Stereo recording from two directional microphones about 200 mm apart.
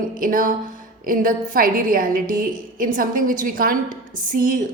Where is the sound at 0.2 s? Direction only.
45° right (ahead or behind).